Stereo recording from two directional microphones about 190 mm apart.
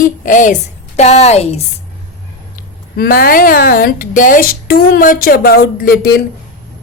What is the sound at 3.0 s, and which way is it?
Speech, 55° left (ahead or behind).